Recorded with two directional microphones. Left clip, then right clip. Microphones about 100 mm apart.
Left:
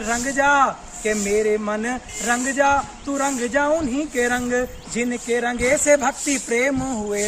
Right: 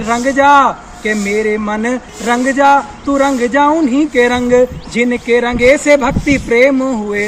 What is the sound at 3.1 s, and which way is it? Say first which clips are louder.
Speech: right 10 dB; 35° left (ahead or behind).